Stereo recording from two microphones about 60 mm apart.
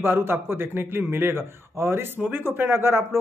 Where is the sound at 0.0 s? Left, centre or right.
Right.